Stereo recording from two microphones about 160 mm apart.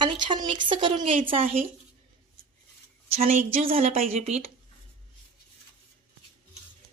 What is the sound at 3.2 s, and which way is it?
Speech, 55° right (ahead or behind).